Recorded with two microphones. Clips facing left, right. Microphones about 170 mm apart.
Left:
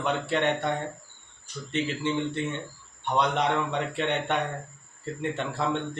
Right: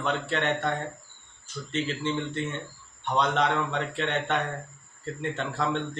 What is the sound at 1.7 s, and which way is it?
A man's voice, 15° left (ahead or behind).